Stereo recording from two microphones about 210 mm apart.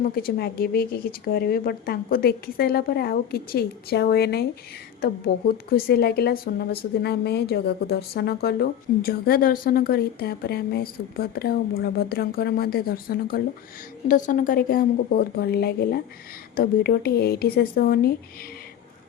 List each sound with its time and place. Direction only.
0.2 s a woman's voice: 45° left (ahead or behind)